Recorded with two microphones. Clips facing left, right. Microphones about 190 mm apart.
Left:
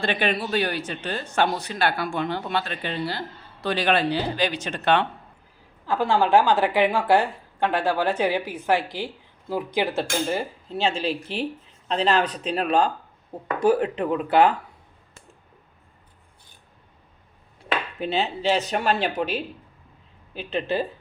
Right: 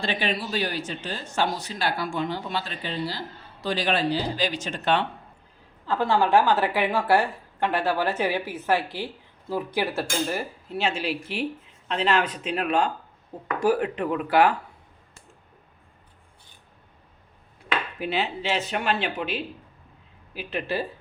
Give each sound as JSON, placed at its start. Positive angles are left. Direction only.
{"t": 0.0, "sound": "speech", "side_deg": 55}
{"t": 5.8, "sound": "a woman's voice", "side_deg": 10}
{"t": 11.9, "sound": "speech", "side_deg": 35}
{"t": 13.6, "sound": "speech", "side_deg": 25}
{"t": 18.0, "sound": "speech", "side_deg": 25}
{"t": 20.5, "sound": "speech", "side_deg": 20}